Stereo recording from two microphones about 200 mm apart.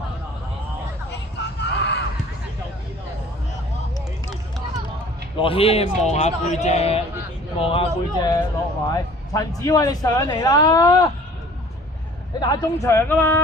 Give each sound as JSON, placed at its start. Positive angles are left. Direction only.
{"t": 1.4, "sound": "a sound", "side_deg": 60}
{"t": 5.4, "sound": "a man's voice", "side_deg": 30}
{"t": 12.4, "sound": "a man's voice", "side_deg": 20}